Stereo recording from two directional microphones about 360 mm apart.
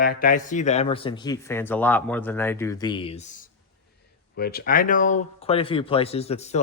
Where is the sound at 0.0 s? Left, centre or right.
Left.